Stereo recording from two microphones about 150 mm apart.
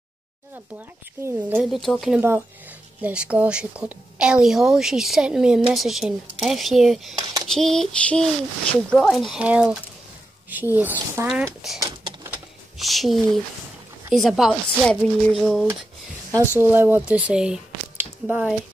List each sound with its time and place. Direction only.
1.6 s a woman's voice: centre (ahead or behind)
2.1 s a woman's voice: 15° right (ahead or behind)
11.8 s a sound: 25° right (ahead or behind)
12.3 s a sound: centre (ahead or behind)
14.1 s a woman's voice: centre (ahead or behind)
16.3 s speech: 15° right (ahead or behind)